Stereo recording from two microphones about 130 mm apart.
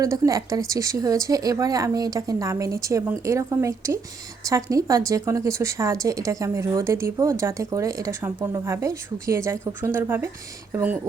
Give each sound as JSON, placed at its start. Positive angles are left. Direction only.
{"t": 0.0, "sound": "a woman's voice", "side_deg": -25}